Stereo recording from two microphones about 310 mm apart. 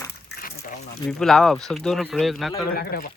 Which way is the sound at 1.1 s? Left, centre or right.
Centre.